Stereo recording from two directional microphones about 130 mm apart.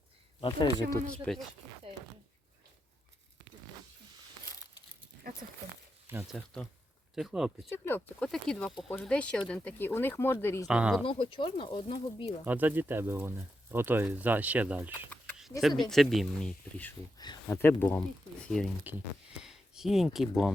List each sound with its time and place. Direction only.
0.3 s speech: 40° left (ahead or behind)
1.0 s speech: 10° left (ahead or behind)
4.4 s a sound: 25° left (ahead or behind)
6.3 s speech: 5° left (ahead or behind)
7.7 s speech: 15° left (ahead or behind)
10.7 s speech: 10° right (ahead or behind)
11.0 s speech: 40° left (ahead or behind)
12.5 s speech: 15° right (ahead or behind)
15.6 s speech: centre (ahead or behind); by 18.0 s 15° left (ahead or behind)
18.9 s speech: 15° right (ahead or behind)
19.4 s speech: 5° right (ahead or behind)